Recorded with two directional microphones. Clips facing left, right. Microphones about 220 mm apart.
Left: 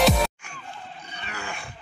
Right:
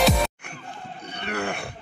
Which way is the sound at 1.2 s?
60° right (ahead or behind).